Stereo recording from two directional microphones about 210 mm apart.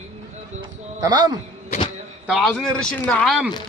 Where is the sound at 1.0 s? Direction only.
20° right (ahead or behind).